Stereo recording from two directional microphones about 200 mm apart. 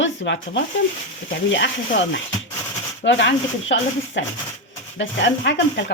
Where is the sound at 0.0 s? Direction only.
65° left (ahead or behind).